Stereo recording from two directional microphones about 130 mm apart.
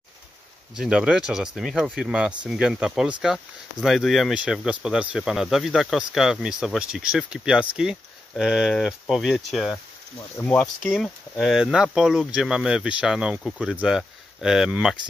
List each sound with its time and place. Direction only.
0.7 s speech: 5° right (ahead or behind)